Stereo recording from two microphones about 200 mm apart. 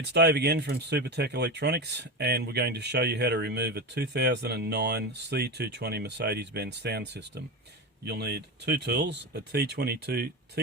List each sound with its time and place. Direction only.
0.1 s speech: 55° right (ahead or behind)